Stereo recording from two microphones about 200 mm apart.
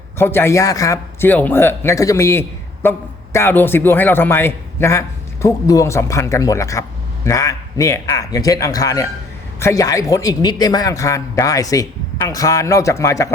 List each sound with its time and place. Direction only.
0.2 s speech: 10° left (ahead or behind)